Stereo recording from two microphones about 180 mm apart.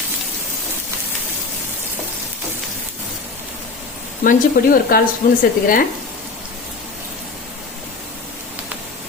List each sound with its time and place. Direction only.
4.2 s speech: 50° left (ahead or behind)